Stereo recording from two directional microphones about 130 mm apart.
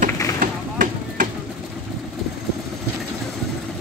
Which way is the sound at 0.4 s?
90° right.